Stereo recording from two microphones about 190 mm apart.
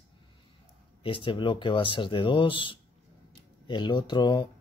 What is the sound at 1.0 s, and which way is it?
Speech, 25° left (ahead or behind).